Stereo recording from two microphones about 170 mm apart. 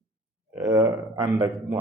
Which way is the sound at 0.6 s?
20° right (ahead or behind).